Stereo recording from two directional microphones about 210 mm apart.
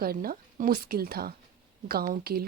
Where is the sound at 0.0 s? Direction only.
45° right (ahead or behind).